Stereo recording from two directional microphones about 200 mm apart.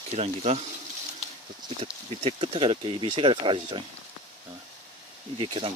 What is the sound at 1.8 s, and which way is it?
Speech, 30° right (ahead or behind).